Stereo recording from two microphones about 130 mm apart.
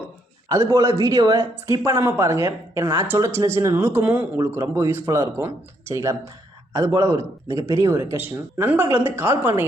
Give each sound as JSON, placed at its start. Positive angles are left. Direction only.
{"t": 0.4, "sound": "speech", "side_deg": -25}